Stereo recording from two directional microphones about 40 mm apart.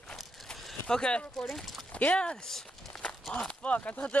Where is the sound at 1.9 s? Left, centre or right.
Left.